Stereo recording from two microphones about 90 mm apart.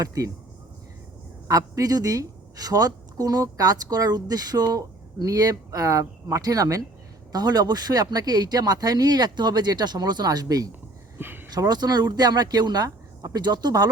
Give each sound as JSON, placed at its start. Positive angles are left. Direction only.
{"t": 0.0, "sound": "speech", "side_deg": -40}
{"t": 1.5, "sound": "a woman's voice", "side_deg": -40}
{"t": 11.2, "sound": "a sound", "side_deg": -25}
{"t": 11.5, "sound": "a woman's voice", "side_deg": -50}